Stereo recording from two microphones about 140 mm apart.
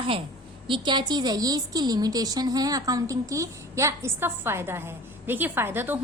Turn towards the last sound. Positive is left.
turn(degrees=-15)  # may be behind; listen again after turning